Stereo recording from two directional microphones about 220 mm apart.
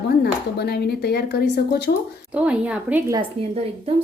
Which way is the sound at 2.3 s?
5° right (ahead or behind).